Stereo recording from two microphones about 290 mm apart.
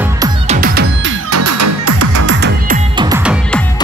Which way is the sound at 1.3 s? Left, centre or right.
Right.